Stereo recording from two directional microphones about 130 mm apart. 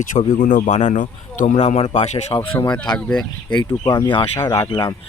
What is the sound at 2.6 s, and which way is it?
Speech, 30° left (ahead or behind).